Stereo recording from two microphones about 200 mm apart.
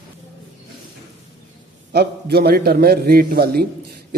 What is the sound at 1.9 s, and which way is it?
Speech, 55° right (ahead or behind).